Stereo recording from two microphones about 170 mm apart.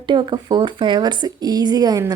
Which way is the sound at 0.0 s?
25° right (ahead or behind).